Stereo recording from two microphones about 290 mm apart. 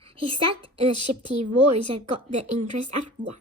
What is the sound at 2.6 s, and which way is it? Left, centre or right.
Speech, right.